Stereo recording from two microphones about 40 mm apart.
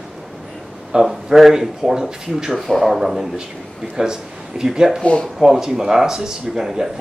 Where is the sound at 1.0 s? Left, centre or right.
Centre.